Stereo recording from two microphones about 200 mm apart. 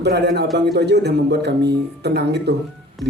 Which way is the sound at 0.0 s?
55° right (ahead or behind).